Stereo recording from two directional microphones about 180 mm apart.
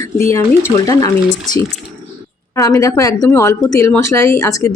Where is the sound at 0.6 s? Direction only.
20° left (ahead or behind).